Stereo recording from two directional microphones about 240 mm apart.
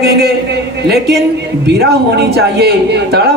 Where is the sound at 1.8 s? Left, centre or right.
Right.